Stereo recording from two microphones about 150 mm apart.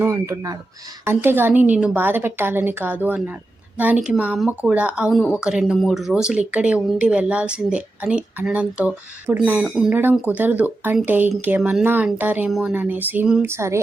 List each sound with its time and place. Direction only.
0.0 s speech: 20° right (ahead or behind)